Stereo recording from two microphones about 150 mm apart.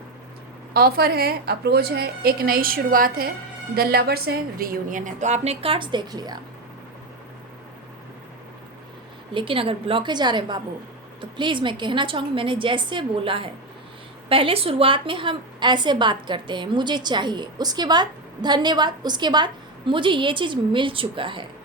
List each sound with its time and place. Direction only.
0.7 s a woman's voice: 90° right; by 3.2 s 75° right (ahead or behind)
3.8 s a woman's voice: 90° right; by 6.4 s 25° right (ahead or behind)
9.3 s a woman's voice: 35° right (ahead or behind)